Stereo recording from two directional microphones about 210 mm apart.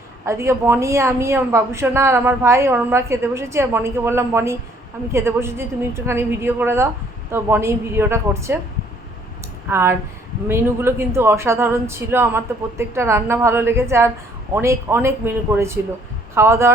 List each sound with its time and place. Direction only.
0.3 s a woman's voice: 15° right (ahead or behind)
9.6 s a woman's voice: 10° right (ahead or behind)